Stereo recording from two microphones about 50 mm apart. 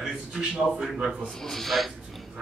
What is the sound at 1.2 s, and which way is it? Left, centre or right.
Speech, centre.